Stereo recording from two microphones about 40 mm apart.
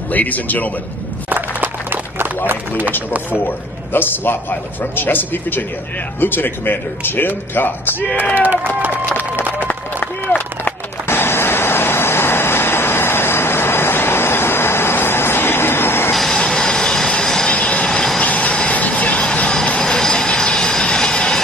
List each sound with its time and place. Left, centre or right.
0.1 s a man's voice: left
1.3 s a sound: right
3.3 s a man's voice: left
8.4 s speech: right
8.9 s run: left
9.9 s a sound: left
16.3 s train: left
17.2 s vehicle: centre
17.5 s vehicle: left
17.8 s vehicle: centre
18.2 s vehicle: left
19.8 s vehicle: centre
20.8 s train: left